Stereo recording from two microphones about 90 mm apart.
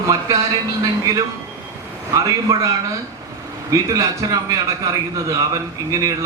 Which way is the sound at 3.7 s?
35° right (ahead or behind).